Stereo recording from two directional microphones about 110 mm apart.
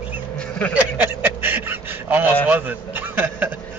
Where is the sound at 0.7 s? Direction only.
15° right (ahead or behind).